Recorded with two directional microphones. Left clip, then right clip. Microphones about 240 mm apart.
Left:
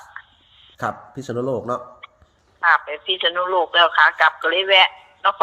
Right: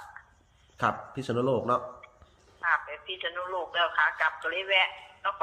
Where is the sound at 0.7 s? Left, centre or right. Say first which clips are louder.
Left 2 dB; left.